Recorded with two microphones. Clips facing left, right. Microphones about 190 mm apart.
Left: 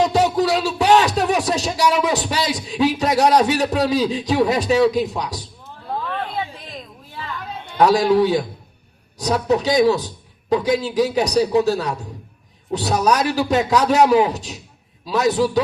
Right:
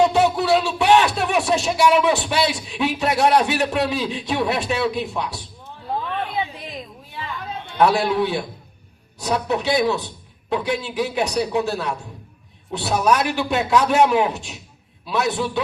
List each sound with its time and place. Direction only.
0.1 s a sound: 40° left (ahead or behind)
1.3 s speech: 40° left (ahead or behind)
7.8 s a man's voice: 40° left (ahead or behind)